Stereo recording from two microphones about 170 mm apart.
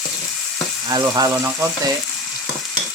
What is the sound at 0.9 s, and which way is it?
Speech, 20° right (ahead or behind).